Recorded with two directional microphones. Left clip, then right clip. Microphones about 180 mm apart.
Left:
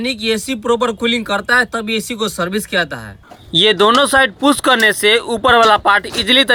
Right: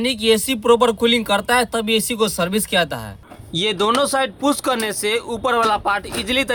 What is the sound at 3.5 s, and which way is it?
Speech, 20° left (ahead or behind).